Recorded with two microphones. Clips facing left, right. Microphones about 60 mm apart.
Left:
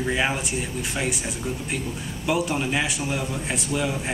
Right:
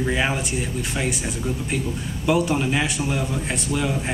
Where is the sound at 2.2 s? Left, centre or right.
Centre.